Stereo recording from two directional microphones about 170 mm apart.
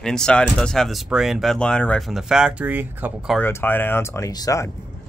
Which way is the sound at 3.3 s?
10° left (ahead or behind).